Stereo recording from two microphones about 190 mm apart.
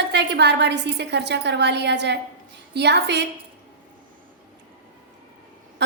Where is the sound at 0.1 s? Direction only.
65° right (ahead or behind).